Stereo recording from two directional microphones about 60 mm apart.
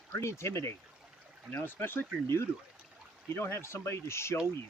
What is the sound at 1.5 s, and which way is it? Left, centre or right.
Speech, left.